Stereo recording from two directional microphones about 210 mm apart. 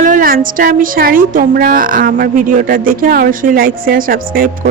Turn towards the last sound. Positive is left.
turn(degrees=-45)  # may be behind; listen again after turning